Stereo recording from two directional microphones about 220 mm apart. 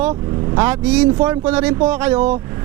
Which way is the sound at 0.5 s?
10° right (ahead or behind).